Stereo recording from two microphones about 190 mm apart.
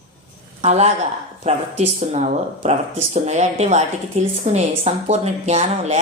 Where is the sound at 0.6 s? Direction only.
35° right (ahead or behind).